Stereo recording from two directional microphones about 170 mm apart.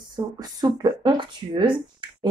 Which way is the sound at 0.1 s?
25° right (ahead or behind).